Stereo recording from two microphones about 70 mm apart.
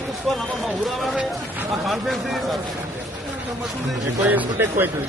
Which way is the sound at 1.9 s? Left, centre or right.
Centre.